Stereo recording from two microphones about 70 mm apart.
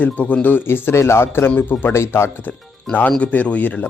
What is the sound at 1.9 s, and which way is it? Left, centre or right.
Speech, left.